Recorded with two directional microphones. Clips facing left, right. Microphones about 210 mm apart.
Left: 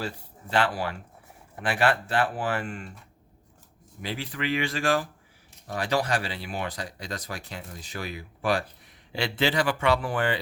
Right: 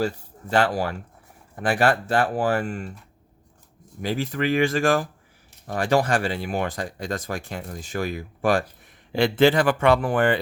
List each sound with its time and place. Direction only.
0.5 s speech: 45° right (ahead or behind)
4.0 s speech: 45° right (ahead or behind)